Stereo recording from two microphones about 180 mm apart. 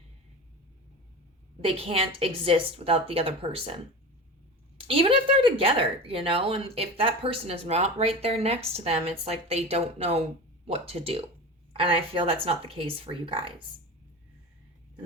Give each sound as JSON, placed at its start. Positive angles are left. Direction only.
{"t": 1.6, "sound": "speech", "side_deg": -35}
{"t": 4.9, "sound": "speech", "side_deg": -30}